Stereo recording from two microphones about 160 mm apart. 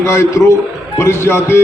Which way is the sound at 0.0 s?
20° left (ahead or behind).